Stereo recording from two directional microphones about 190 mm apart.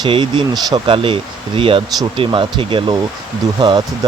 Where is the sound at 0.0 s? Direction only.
25° right (ahead or behind).